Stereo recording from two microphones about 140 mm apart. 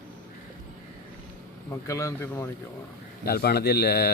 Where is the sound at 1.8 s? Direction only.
20° left (ahead or behind).